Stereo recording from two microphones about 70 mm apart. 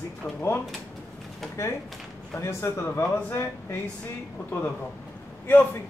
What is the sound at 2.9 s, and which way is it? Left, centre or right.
Speech, left.